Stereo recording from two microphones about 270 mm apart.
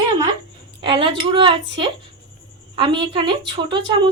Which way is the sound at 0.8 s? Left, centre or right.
Centre.